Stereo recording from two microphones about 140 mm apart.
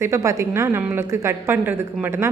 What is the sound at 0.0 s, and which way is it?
A woman's voice, 20° right (ahead or behind).